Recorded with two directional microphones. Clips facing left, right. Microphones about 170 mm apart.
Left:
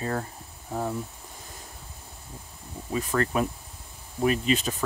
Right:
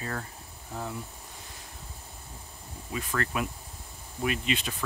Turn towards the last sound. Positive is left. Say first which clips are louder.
# left 6 dB
turn(degrees=40)  # may be behind; listen again after turning